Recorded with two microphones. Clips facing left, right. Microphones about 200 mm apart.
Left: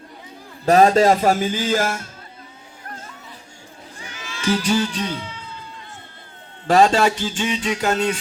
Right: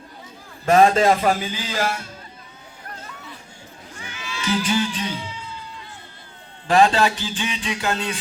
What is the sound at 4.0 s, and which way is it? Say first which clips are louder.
Music: right 2 dB; 40° left (ahead or behind).